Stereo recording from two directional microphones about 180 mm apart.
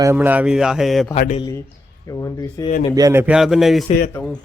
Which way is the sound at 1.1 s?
45° left (ahead or behind).